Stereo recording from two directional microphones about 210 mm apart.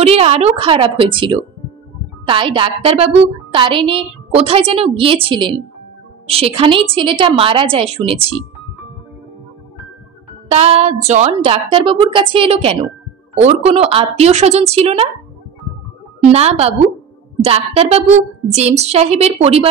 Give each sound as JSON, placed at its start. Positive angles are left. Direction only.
{"t": 0.0, "sound": "a woman's voice", "side_deg": -30}
{"t": 10.5, "sound": "a woman's voice", "side_deg": -30}
{"t": 16.3, "sound": "a woman's voice", "side_deg": -30}